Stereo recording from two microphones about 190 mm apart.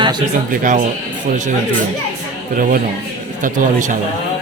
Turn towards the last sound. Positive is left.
turn(degrees=-40)  # may be behind; listen again after turning